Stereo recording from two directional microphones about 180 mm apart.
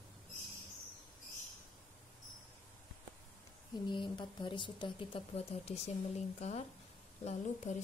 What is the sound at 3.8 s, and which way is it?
Speech, 25° left (ahead or behind).